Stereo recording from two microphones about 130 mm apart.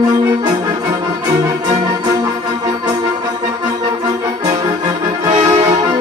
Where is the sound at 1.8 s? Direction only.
30° right (ahead or behind).